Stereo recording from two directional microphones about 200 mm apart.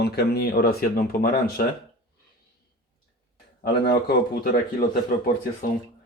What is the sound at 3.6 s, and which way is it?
Speech, 50° left (ahead or behind).